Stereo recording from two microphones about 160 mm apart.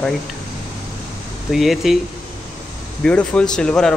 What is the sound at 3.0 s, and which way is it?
Speech, 5° left (ahead or behind).